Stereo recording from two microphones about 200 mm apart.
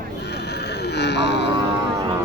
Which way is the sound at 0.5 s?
55° left (ahead or behind).